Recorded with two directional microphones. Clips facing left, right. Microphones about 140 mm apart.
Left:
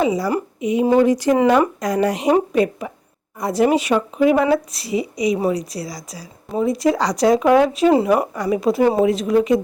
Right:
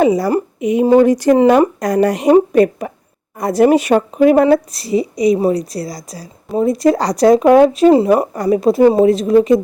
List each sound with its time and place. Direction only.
0.0 s speech: 50° right (ahead or behind); by 9.6 s 35° right (ahead or behind)